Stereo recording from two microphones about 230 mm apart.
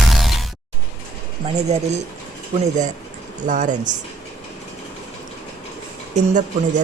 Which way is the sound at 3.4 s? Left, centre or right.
Right.